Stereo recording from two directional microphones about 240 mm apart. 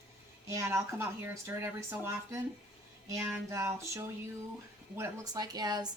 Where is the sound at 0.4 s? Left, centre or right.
Centre.